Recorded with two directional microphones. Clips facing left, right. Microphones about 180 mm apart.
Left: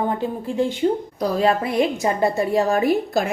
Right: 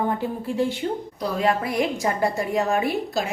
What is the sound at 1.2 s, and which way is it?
A woman's voice, 35° left (ahead or behind).